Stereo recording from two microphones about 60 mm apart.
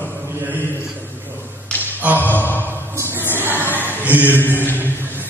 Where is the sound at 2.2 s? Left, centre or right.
Left.